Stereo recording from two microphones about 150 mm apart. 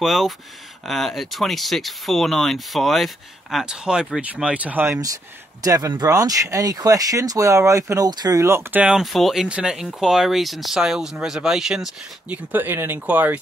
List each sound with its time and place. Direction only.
0.0 s speech: centre (ahead or behind)
5.0 s speech: 25° right (ahead or behind)
8.8 s speech: centre (ahead or behind)